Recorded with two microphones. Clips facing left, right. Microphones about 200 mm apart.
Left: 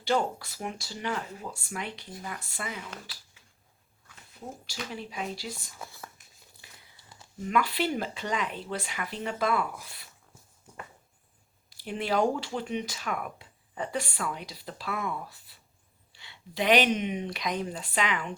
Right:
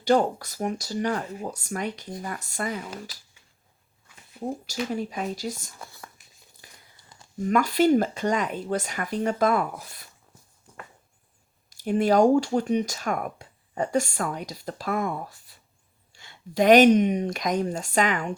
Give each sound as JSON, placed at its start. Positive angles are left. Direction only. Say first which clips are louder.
{"t": 0.0, "sound": "speech", "louder": "right 6 dB", "side_deg": -45}
{"t": 4.6, "sound": "speech", "louder": "right 7 dB", "side_deg": -45}
{"t": 5.8, "sound": "speech", "louder": "even", "side_deg": 0}
{"t": 6.6, "sound": "crumpling", "louder": "right 3 dB", "side_deg": -45}
{"t": 7.3, "sound": "speech", "louder": "right 6 dB", "side_deg": -45}
{"t": 11.7, "sound": "speech", "louder": "right 9 dB", "side_deg": -45}